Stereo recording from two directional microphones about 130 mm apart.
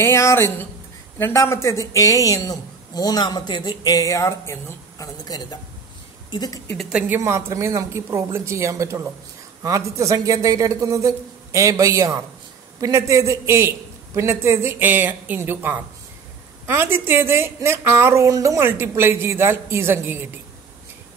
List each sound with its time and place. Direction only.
0.0 s speech: 20° left (ahead or behind)
6.8 s a woman's voice: 10° right (ahead or behind)
7.2 s a woman's voice: 20° right (ahead or behind)